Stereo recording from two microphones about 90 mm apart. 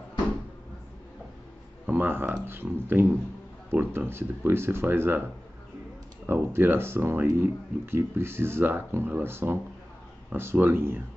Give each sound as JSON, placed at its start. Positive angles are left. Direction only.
{"t": 1.9, "sound": "speech", "side_deg": -20}
{"t": 6.2, "sound": "speech", "side_deg": -25}